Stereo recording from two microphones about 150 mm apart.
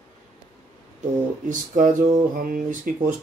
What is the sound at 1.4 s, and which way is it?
Speech, 60° right (ahead or behind).